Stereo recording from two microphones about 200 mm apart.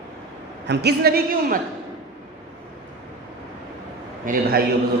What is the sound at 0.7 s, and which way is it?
Speech, 55° right (ahead or behind).